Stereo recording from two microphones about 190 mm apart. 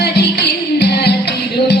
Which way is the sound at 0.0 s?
60° left (ahead or behind).